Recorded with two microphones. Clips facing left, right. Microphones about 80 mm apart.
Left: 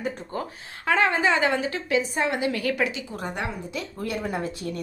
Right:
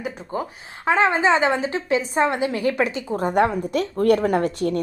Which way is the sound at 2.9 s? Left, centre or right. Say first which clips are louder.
Right 11 dB; right.